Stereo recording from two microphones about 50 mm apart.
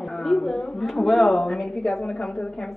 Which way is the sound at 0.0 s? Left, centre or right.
Centre.